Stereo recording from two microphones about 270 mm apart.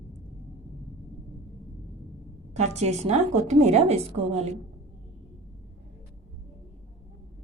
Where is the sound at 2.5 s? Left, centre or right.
Right.